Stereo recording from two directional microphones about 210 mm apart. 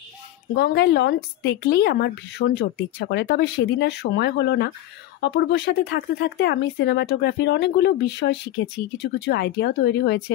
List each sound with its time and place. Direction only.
0.6 s a woman's voice: 55° left (ahead or behind)